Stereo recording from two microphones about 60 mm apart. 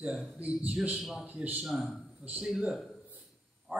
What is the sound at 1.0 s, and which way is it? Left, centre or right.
Speech, centre.